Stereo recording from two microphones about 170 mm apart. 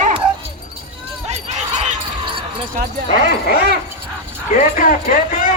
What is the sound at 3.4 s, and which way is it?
Dog, 65° left (ahead or behind).